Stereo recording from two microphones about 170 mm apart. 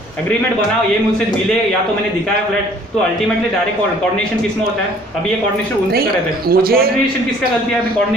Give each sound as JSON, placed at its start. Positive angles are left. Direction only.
{"t": 6.5, "sound": "a man's voice", "side_deg": -60}